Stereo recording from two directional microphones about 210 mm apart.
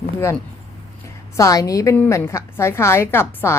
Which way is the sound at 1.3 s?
15° left (ahead or behind).